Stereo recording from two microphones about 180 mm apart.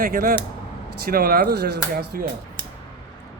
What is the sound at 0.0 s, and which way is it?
Speech, 50° right (ahead or behind).